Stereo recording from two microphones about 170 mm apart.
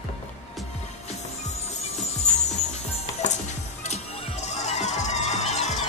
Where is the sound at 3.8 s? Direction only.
40° left (ahead or behind).